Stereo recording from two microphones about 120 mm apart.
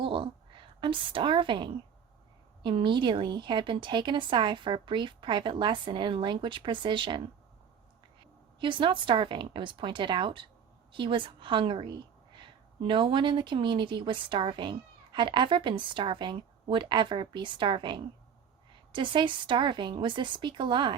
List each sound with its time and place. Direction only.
0.0 s a sound: 45° right (ahead or behind)
2.6 s a woman's voice: 40° right (ahead or behind)
8.6 s a woman's voice: 45° right (ahead or behind)